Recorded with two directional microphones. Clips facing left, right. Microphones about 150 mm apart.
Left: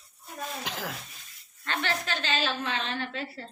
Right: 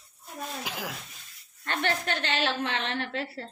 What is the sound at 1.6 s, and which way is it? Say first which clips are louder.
A woman's voice: right 2 dB; 55° right (ahead or behind).